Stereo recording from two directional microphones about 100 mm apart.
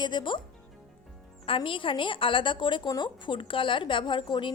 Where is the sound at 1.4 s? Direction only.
60° left (ahead or behind).